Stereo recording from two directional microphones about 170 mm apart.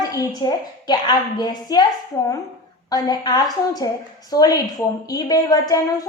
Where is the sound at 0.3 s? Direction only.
25° left (ahead or behind).